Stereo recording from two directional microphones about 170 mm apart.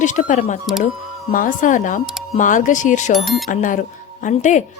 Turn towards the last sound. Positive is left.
turn(degrees=45)  # may be behind; listen again after turning